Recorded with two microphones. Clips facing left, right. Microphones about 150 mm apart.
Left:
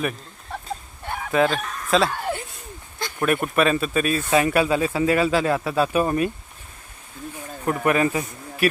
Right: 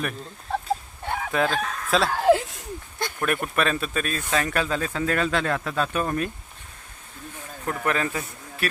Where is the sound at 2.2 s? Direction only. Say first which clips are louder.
Right 9 dB; 90° right.